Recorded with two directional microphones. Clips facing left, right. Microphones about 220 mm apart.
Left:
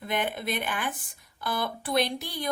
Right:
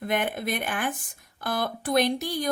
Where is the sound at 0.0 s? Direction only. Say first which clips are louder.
Right 3 dB; 50° right (ahead or behind).